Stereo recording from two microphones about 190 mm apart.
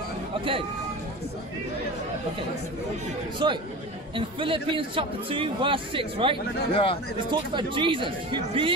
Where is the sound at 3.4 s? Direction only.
25° right (ahead or behind).